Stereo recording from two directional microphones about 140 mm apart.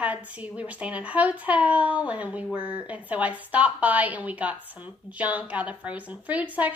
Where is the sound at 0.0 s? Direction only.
10° right (ahead or behind).